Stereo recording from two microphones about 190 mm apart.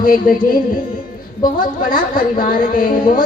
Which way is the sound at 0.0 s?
50° left (ahead or behind).